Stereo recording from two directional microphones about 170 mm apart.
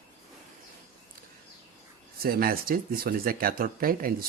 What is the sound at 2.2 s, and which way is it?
Speech, 60° right (ahead or behind).